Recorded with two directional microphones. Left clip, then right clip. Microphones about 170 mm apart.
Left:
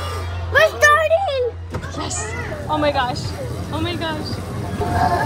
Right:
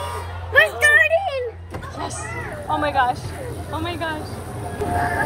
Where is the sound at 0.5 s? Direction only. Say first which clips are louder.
Left 1 dB; 30° left (ahead or behind).